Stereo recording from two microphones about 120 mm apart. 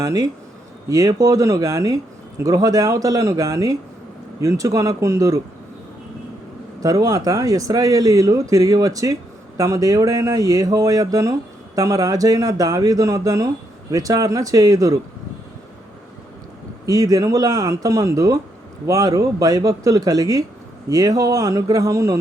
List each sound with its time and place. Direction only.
0.0 s speech: 30° right (ahead or behind)
6.8 s speech: 30° right (ahead or behind)
16.8 s speech: 30° right (ahead or behind)